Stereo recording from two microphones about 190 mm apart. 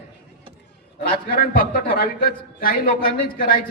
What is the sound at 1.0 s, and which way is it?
A man's voice, 50° left (ahead or behind).